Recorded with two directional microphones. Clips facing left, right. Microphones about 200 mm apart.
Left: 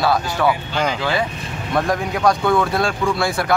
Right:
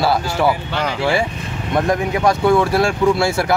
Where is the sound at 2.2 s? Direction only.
25° right (ahead or behind).